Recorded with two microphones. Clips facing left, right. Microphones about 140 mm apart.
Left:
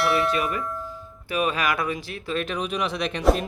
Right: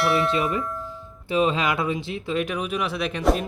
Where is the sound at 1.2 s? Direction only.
25° right (ahead or behind); by 3.4 s centre (ahead or behind).